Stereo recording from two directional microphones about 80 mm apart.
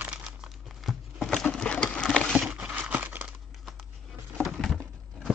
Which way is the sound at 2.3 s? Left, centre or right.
Centre.